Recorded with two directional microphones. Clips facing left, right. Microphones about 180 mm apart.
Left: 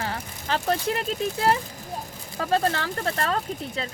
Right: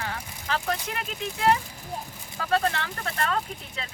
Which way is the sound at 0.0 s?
35° left (ahead or behind).